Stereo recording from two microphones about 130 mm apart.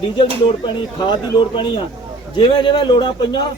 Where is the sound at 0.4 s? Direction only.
40° left (ahead or behind).